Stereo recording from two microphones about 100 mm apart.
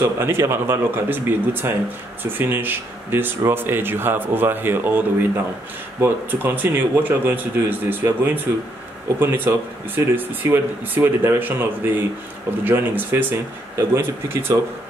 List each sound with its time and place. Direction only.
0.0 s speech: 25° right (ahead or behind)